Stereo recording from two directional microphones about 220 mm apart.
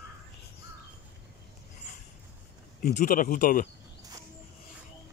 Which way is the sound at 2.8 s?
40° left (ahead or behind).